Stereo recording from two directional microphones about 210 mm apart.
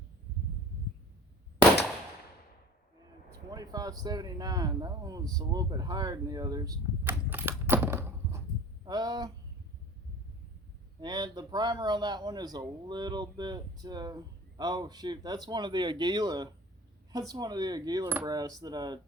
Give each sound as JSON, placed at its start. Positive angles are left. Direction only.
{"t": 3.5, "sound": "speech", "side_deg": -15}
{"t": 7.7, "sound": "coin", "side_deg": -10}
{"t": 8.8, "sound": "a sound", "side_deg": -20}
{"t": 11.0, "sound": "speech", "side_deg": -20}